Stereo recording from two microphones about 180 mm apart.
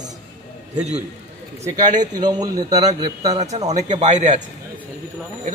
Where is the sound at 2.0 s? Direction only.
20° right (ahead or behind).